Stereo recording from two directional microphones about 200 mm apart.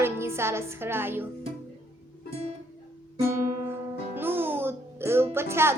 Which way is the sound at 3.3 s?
10° right (ahead or behind).